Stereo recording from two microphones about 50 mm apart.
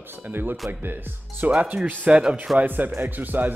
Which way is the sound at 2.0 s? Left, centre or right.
Centre.